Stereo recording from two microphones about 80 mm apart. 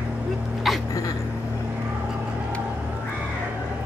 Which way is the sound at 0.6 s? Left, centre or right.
Centre.